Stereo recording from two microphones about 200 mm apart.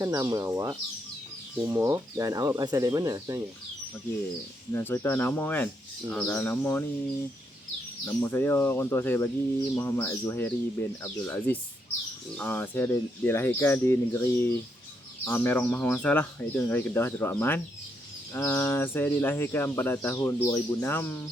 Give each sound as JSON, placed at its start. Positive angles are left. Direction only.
{"t": 0.0, "sound": "speech", "side_deg": -15}
{"t": 4.7, "sound": "speech", "side_deg": 10}
{"t": 8.0, "sound": "speech", "side_deg": 10}